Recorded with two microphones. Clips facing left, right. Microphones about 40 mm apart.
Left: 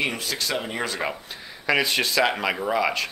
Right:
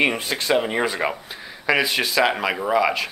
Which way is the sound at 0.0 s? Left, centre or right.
Right.